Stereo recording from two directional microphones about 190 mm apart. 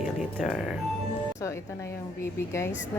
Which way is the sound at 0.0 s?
Centre (ahead or behind).